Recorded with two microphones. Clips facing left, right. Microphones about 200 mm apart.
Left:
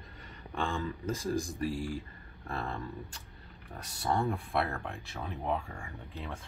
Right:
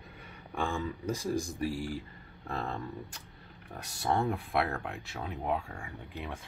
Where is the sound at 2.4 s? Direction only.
20° right (ahead or behind).